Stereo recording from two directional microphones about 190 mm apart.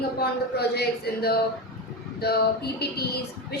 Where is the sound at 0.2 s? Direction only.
55° left (ahead or behind).